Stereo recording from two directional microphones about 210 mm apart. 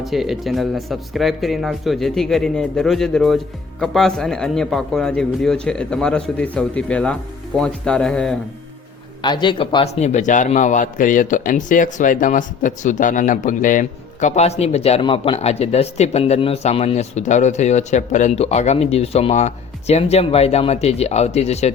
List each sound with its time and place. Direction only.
0.0 s speech: centre (ahead or behind)
9.2 s a man's voice: 20° left (ahead or behind)